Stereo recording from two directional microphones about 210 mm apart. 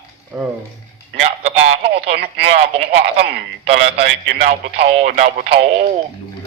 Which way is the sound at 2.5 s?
30° right (ahead or behind).